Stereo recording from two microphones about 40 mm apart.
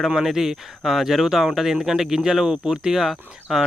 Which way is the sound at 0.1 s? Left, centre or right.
Centre.